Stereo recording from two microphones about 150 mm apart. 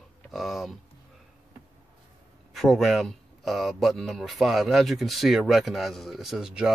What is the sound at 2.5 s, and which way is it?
Speech, centre (ahead or behind).